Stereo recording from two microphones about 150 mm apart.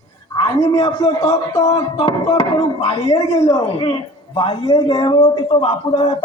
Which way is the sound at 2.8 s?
45° left (ahead or behind).